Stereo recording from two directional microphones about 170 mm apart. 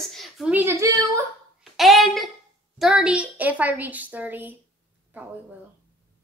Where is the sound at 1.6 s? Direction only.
Centre (ahead or behind).